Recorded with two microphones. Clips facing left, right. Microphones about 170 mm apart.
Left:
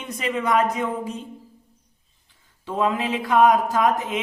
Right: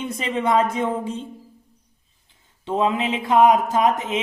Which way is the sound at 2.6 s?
25° right (ahead or behind).